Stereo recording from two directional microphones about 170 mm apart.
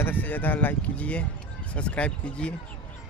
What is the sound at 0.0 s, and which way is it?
Speech, 10° left (ahead or behind).